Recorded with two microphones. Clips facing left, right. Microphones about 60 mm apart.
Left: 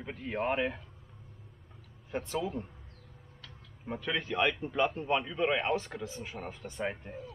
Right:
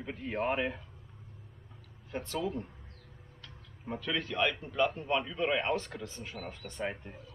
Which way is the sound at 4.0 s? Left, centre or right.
Centre.